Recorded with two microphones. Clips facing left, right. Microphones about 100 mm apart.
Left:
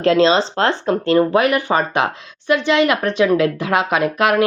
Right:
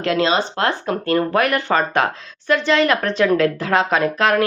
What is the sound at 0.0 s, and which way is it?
Speech, 30° left (ahead or behind).